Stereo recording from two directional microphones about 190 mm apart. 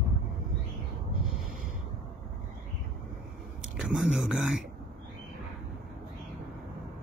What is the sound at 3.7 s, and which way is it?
Speech, 5° right (ahead or behind).